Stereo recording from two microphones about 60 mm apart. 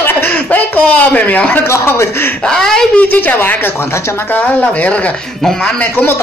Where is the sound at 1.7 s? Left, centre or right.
Left.